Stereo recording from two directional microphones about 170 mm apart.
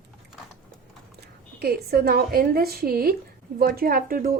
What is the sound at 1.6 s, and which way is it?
A woman's voice, 65° right (ahead or behind).